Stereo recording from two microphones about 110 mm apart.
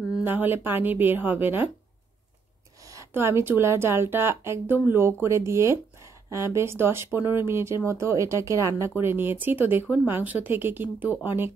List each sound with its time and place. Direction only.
0.2 s speech: 20° right (ahead or behind)
2.9 s speech: 25° right (ahead or behind)